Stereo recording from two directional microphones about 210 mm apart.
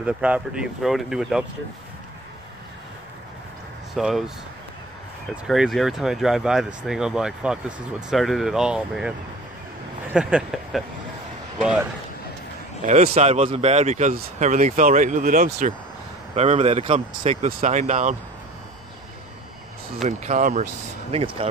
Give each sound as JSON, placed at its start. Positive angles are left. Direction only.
{"t": 0.0, "sound": "speech", "side_deg": -5}
{"t": 3.9, "sound": "speech", "side_deg": 0}
{"t": 5.3, "sound": "speech", "side_deg": 0}
{"t": 10.1, "sound": "speech", "side_deg": -5}
{"t": 12.8, "sound": "speech", "side_deg": -35}
{"t": 20.0, "sound": "speech", "side_deg": -35}